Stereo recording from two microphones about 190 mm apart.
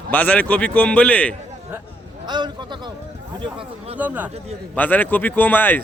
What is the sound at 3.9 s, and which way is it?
Speech, 10° right (ahead or behind).